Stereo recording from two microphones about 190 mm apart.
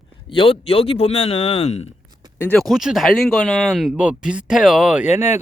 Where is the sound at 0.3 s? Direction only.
25° left (ahead or behind).